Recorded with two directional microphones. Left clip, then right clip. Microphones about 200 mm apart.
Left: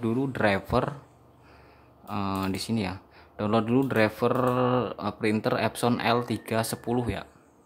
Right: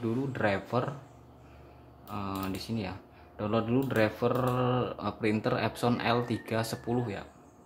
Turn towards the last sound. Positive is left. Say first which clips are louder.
# left 4 dB
turn(degrees=30)  # may be behind; listen again after turning